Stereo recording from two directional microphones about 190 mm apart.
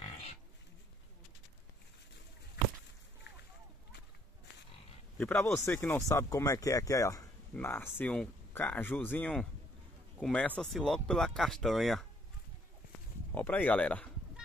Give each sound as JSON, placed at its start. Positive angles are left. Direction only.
{"t": 0.0, "sound": "pig", "side_deg": 30}
{"t": 5.1, "sound": "speech", "side_deg": 10}
{"t": 13.3, "sound": "speech", "side_deg": 10}